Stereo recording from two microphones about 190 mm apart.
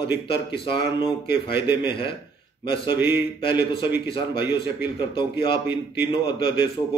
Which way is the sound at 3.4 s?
25° left (ahead or behind).